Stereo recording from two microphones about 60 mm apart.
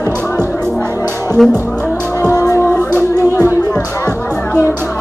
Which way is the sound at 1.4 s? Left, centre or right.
Centre.